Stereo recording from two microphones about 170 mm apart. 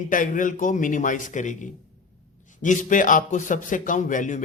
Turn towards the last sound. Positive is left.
turn(degrees=50)  # may be behind; listen again after turning